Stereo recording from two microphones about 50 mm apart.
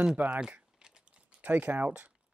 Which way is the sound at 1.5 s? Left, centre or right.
Right.